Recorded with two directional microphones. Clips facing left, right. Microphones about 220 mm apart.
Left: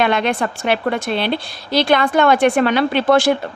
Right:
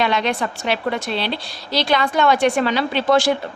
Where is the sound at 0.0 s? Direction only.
55° left (ahead or behind).